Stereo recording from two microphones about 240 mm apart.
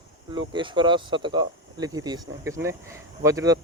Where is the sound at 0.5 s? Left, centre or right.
Centre.